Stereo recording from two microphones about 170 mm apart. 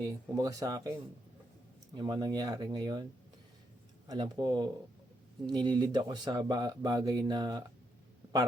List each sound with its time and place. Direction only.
0.0 s speech: 20° right (ahead or behind)
2.0 s speech: 25° right (ahead or behind)
4.1 s speech: 25° right (ahead or behind)